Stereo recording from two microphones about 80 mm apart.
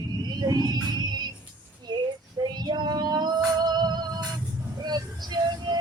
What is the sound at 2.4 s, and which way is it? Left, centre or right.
Child singing, right.